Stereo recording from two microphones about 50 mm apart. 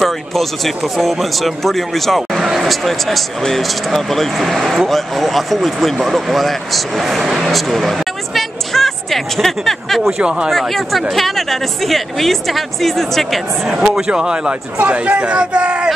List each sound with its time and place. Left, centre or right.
0.0 s speech: centre
10.0 s a man's voice: centre
10.6 s speech: centre
13.7 s a man's voice: centre
14.8 s speech: right